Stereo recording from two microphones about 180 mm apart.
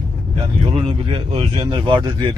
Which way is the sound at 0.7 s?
30° right (ahead or behind).